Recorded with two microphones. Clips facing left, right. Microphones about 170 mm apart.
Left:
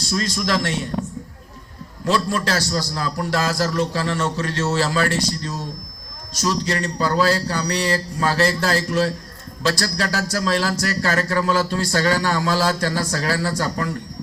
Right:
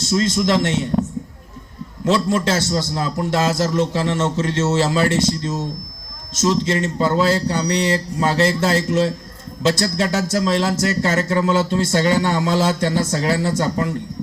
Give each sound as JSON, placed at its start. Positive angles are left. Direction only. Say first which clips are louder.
{"t": 0.0, "sound": "a man's voice", "louder": "right 5 dB", "side_deg": -20}
{"t": 2.0, "sound": "a man's voice", "louder": "right 3 dB", "side_deg": -20}